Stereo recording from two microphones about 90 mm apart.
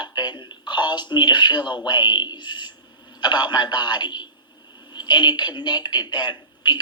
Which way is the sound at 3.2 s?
55° left (ahead or behind).